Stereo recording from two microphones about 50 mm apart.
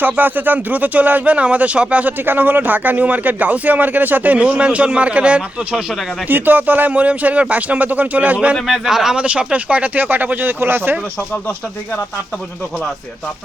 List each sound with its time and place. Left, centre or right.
0.0 s speech: right
2.2 s speech: right
6.2 s speech: right
8.6 s speech: centre
9.1 s speech: right